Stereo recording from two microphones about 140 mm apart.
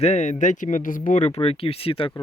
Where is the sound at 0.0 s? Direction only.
55° left (ahead or behind).